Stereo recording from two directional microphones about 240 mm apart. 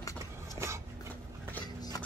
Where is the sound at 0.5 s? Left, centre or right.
Centre.